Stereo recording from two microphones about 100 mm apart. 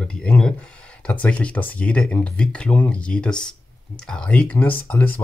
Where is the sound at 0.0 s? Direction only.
10° left (ahead or behind).